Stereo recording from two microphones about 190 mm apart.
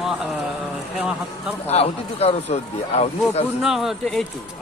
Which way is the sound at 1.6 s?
35° left (ahead or behind).